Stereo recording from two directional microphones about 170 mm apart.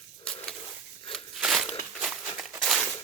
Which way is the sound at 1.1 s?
Centre (ahead or behind).